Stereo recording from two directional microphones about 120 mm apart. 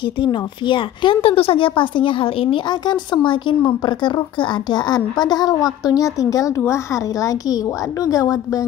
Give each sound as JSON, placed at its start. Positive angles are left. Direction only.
{"t": 0.2, "sound": "a woman's voice", "side_deg": 45}
{"t": 2.7, "sound": "speech", "side_deg": 40}